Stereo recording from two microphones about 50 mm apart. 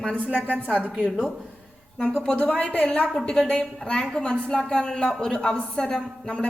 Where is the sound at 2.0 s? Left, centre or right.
Centre.